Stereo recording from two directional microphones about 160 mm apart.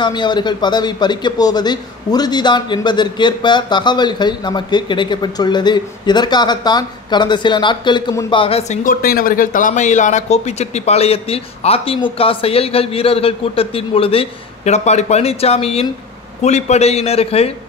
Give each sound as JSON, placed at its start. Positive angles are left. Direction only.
{"t": 0.0, "sound": "a man's voice", "side_deg": 30}
{"t": 8.4, "sound": "speech", "side_deg": 40}
{"t": 8.8, "sound": "speech", "side_deg": 65}